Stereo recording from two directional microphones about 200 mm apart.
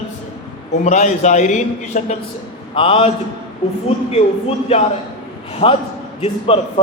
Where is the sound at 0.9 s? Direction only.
35° left (ahead or behind).